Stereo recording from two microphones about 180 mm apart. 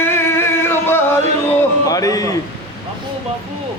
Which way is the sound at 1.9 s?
20° left (ahead or behind).